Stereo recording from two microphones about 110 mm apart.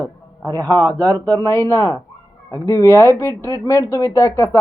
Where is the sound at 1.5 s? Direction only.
25° left (ahead or behind).